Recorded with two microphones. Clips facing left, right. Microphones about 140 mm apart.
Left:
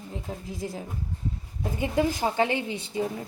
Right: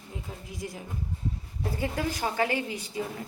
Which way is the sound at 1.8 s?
20° left (ahead or behind).